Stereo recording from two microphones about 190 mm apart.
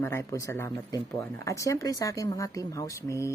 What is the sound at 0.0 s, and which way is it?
Speech, 15° left (ahead or behind).